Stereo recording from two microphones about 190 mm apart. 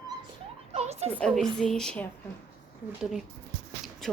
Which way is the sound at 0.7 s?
35° right (ahead or behind).